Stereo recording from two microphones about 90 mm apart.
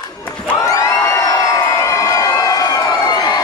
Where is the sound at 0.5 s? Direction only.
35° left (ahead or behind).